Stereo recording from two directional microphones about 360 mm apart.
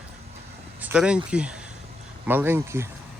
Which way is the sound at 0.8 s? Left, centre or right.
Centre.